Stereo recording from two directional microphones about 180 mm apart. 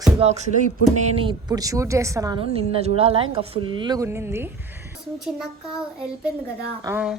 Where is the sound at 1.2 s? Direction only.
25° right (ahead or behind).